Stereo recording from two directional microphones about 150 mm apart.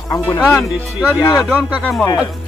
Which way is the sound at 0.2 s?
15° left (ahead or behind).